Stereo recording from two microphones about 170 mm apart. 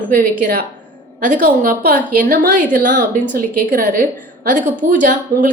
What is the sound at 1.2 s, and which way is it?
A woman's voice, 50° right (ahead or behind).